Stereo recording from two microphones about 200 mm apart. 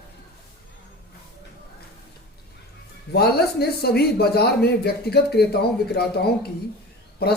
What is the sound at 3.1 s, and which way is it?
Speech, 50° left (ahead or behind).